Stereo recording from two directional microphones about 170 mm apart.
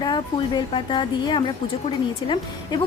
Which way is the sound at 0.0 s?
25° left (ahead or behind).